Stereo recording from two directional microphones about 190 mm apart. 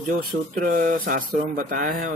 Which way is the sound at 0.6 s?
45° right (ahead or behind).